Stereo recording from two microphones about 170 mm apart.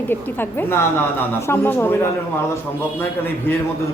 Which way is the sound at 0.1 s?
15° left (ahead or behind).